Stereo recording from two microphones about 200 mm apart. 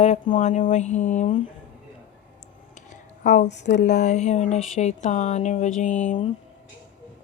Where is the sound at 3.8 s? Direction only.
35° left (ahead or behind).